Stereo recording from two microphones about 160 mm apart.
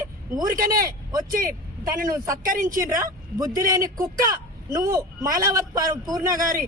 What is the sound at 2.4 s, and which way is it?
Speech, 55° right (ahead or behind).